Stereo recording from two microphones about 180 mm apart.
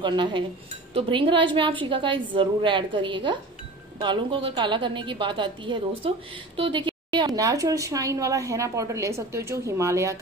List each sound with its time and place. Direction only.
0.0 s a woman's voice: 25° right (ahead or behind)